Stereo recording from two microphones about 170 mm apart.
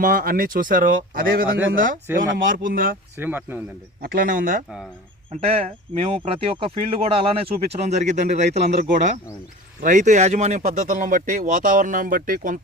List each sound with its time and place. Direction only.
0.0 s speech: 55° right (ahead or behind)
3.2 s speech: 10° right (ahead or behind)
4.0 s speech: 55° right (ahead or behind)
5.3 s speech: 35° right (ahead or behind)
9.8 s speech: 50° right (ahead or behind)